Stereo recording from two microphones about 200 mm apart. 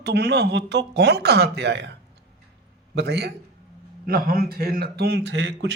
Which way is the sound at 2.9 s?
55° right (ahead or behind).